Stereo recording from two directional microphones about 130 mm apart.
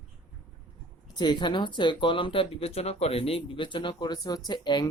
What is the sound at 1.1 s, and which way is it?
Speech, 35° left (ahead or behind).